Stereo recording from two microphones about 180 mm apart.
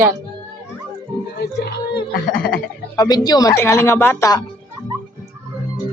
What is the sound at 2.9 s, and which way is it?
Speech, 20° left (ahead or behind).